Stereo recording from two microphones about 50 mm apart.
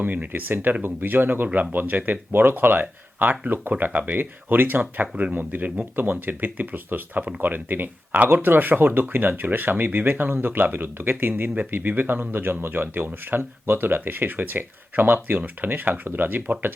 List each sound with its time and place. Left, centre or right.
0.0 s speech: right
4.8 s speech: right